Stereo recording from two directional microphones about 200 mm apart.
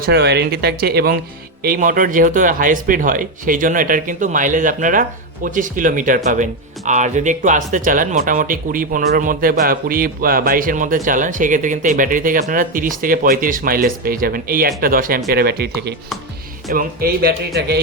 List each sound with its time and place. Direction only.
0.0 s speech: 55° right (ahead or behind)
16.7 s speech: 50° right (ahead or behind)